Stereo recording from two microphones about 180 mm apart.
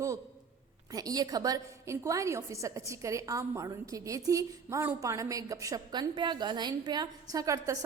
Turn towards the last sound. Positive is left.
turn(degrees=-20)  # may be behind; listen again after turning